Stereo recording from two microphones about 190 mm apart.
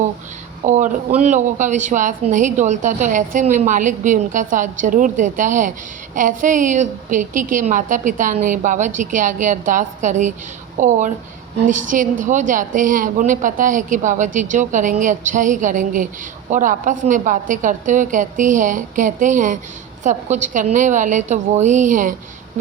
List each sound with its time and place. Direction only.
0.6 s a woman's voice: 40° right (ahead or behind)